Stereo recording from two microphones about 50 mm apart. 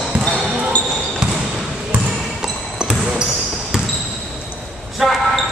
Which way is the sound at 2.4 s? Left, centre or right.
Centre.